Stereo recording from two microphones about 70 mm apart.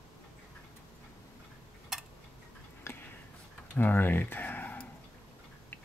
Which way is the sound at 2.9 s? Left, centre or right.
Left.